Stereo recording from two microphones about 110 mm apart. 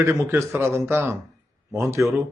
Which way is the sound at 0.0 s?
25° right (ahead or behind).